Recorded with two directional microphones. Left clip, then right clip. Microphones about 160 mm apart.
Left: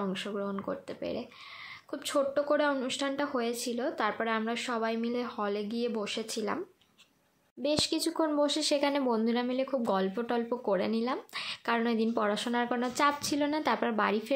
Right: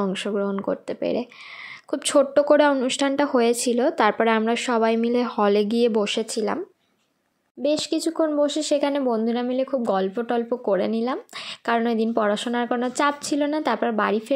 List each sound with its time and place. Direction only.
0.0 s speech: 45° right (ahead or behind)
6.3 s speech: 30° right (ahead or behind)
7.6 s speech: 25° right (ahead or behind)